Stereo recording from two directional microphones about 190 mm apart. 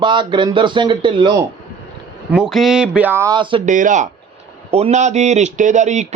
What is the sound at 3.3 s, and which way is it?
Speech, 25° right (ahead or behind).